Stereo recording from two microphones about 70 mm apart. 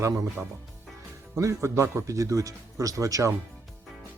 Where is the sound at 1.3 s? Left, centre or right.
Right.